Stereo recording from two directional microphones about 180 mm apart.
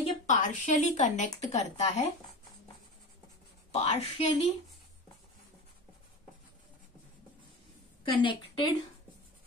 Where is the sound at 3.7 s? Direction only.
35° left (ahead or behind).